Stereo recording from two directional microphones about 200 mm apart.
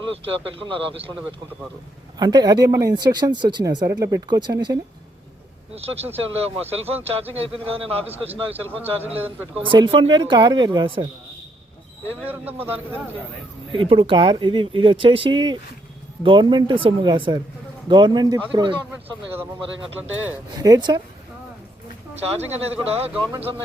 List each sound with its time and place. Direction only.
0.1 s speech: 25° right (ahead or behind)
12.2 s speech: 10° right (ahead or behind)
13.7 s speech: 25° right (ahead or behind)
20.6 s speech: 20° right (ahead or behind)
22.9 s speech: 30° right (ahead or behind)